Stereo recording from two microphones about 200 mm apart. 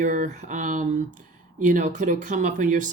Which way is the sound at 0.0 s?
40° right (ahead or behind).